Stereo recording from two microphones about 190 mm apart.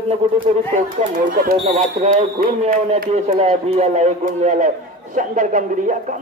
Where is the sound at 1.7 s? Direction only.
40° right (ahead or behind).